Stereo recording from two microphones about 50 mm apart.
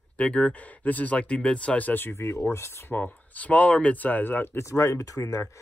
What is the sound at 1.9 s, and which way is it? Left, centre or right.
Speech, left.